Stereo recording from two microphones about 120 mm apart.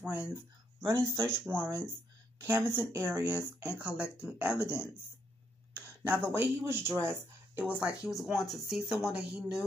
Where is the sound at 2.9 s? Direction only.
25° right (ahead or behind).